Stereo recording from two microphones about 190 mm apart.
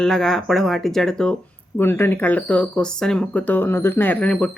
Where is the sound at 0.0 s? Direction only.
5° left (ahead or behind).